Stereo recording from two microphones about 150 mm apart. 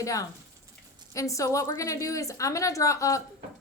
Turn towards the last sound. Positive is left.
turn(degrees=20)  # may be behind; listen again after turning